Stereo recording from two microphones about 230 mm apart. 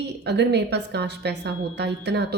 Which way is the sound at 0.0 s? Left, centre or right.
Right.